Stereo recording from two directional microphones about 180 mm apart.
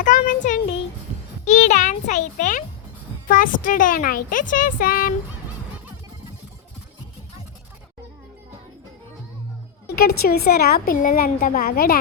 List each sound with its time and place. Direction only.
0.0 s a sound: 45° left (ahead or behind)
1.5 s a child's voice: 40° left (ahead or behind)
9.8 s a woman's voice: 60° left (ahead or behind)